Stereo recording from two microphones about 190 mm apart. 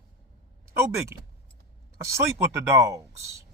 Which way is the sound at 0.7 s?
15° right (ahead or behind).